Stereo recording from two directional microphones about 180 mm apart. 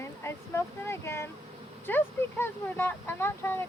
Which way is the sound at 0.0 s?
15° left (ahead or behind).